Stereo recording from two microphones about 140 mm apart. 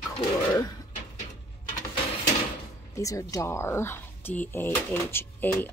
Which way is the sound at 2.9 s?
25° left (ahead or behind).